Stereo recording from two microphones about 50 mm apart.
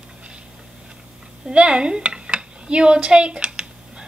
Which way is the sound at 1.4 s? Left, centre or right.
Right.